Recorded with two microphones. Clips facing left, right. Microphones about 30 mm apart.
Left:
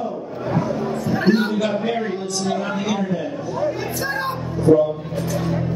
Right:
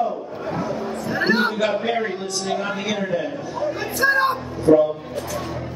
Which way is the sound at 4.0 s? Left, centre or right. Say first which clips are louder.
Right 6 dB; centre.